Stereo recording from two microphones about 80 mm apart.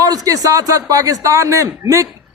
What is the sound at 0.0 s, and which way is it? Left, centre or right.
A man's voice, right.